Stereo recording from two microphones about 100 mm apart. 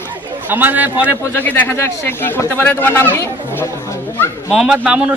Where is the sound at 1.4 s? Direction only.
20° left (ahead or behind).